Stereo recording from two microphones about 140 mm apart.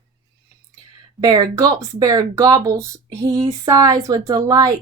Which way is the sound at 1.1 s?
30° right (ahead or behind).